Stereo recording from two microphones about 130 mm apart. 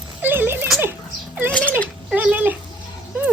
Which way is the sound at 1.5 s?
10° left (ahead or behind).